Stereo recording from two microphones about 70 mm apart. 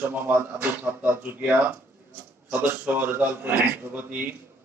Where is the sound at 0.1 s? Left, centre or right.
Right.